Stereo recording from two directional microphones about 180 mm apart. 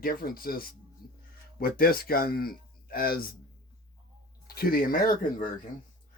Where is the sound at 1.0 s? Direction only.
55° left (ahead or behind).